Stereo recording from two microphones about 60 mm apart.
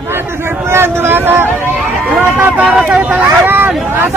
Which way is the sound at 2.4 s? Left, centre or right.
Right.